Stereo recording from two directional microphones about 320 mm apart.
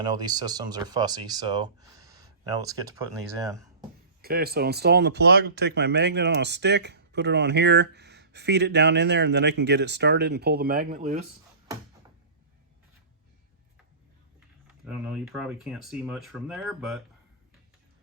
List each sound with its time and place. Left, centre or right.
0.0 s speech: centre
4.2 s speech: right
14.8 s speech: centre